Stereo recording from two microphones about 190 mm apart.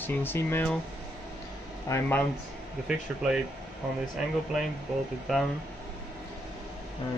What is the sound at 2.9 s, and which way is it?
Speech, 5° right (ahead or behind).